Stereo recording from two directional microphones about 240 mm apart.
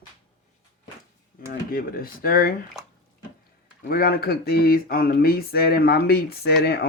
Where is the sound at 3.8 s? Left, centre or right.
Left.